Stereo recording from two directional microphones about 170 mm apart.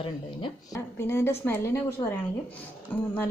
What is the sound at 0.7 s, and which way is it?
Speech, 15° left (ahead or behind).